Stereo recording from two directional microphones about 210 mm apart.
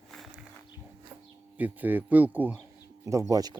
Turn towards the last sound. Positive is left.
turn(degrees=-20)  # may be behind; listen again after turning